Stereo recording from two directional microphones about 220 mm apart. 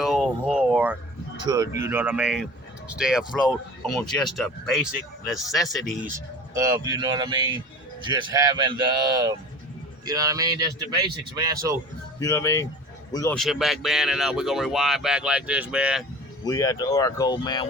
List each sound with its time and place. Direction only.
0.0 s a sound: centre (ahead or behind)
1.5 s speech: 15° right (ahead or behind); by 6.1 s centre (ahead or behind)
6.1 s speech: 15° right (ahead or behind)
12.2 s speech: 10° left (ahead or behind)
13.3 s speech: centre (ahead or behind)
16.4 s speech: 15° left (ahead or behind)